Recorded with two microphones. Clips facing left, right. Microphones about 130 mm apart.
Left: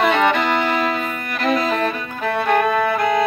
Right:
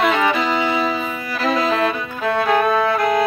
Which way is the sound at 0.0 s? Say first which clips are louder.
Left 1 dB; centre (ahead or behind).